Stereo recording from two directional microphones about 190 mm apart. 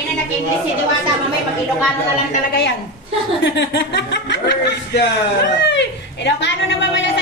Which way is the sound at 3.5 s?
65° left (ahead or behind).